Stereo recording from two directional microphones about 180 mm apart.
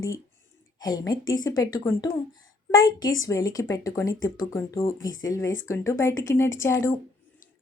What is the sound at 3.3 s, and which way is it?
A woman's voice, 20° left (ahead or behind).